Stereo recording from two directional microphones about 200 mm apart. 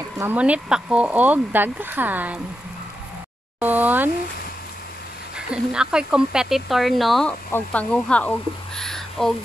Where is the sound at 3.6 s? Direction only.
10° right (ahead or behind).